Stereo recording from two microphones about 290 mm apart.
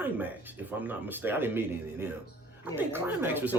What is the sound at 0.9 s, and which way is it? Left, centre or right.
Speech, centre.